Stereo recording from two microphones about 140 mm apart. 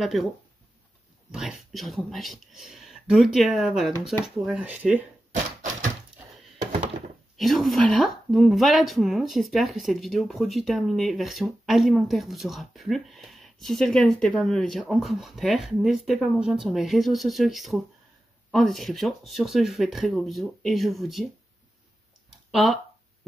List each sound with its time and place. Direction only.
0.0 s speech: centre (ahead or behind)
1.3 s speech: 5° right (ahead or behind)
5.3 s a sound: 65° right (ahead or behind)
7.3 s speech: centre (ahead or behind)
22.5 s speech: centre (ahead or behind)